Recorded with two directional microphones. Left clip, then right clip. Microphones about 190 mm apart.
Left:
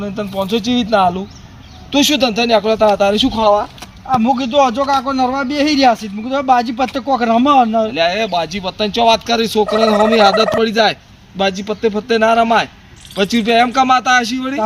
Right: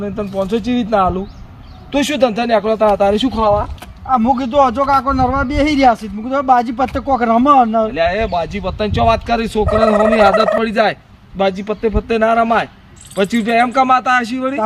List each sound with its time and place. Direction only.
0.0 s speech: 15° right (ahead or behind)
0.6 s speech: 45° right (ahead or behind)
0.9 s speech: 15° right (ahead or behind)
4.1 s speech: 10° left (ahead or behind)
7.9 s speech: 10° right (ahead or behind)